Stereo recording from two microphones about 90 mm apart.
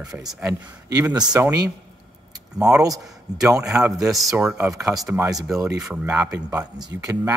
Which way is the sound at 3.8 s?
40° right (ahead or behind).